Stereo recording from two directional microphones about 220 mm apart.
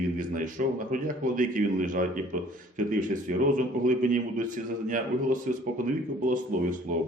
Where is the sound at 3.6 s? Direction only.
35° right (ahead or behind).